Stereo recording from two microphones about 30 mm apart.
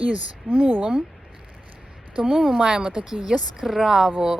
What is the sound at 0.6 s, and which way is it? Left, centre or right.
Speech, right.